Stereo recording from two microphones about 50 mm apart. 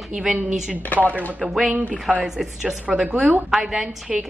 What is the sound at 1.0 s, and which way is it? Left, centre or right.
Speech, right.